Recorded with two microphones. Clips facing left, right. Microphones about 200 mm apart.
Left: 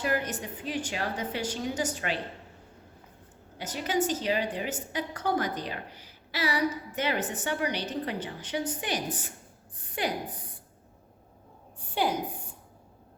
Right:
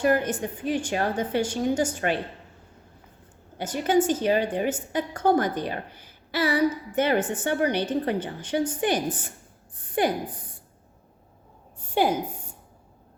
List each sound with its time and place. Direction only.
0.0 s a woman's voice: 50° right (ahead or behind)
3.6 s a woman's voice: 50° right (ahead or behind)